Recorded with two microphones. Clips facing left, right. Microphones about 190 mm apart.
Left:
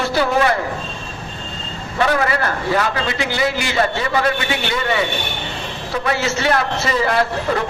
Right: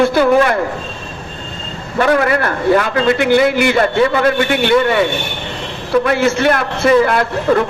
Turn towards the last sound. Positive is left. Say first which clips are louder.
# right 4 dB
turn(degrees=-55)  # may be behind; listen again after turning